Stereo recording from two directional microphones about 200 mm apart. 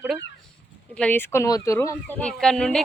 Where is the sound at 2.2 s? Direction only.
5° left (ahead or behind).